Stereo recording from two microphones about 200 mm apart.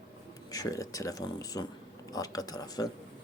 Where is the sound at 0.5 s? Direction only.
15° left (ahead or behind).